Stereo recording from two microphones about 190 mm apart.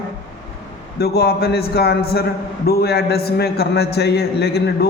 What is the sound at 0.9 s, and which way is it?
A man's voice, 55° left (ahead or behind).